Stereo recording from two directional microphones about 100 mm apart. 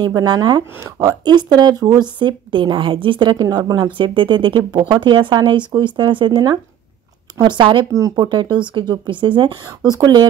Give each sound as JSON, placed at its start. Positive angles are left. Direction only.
{"t": 0.0, "sound": "speech", "side_deg": -45}
{"t": 9.8, "sound": "speech", "side_deg": -35}